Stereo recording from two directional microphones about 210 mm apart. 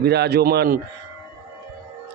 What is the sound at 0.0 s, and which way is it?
Speech, 50° right (ahead or behind).